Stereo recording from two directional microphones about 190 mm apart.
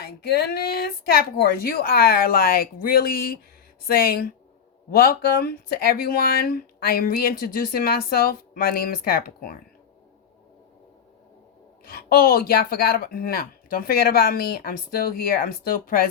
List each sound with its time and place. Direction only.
0.0 s speech: 55° left (ahead or behind)
11.9 s speech: 50° left (ahead or behind)